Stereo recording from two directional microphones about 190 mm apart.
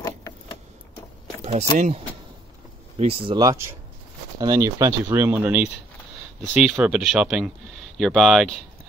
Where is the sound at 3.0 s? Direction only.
30° right (ahead or behind).